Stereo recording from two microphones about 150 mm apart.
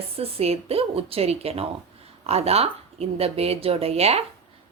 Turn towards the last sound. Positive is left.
turn(degrees=-40)  # may be behind; listen again after turning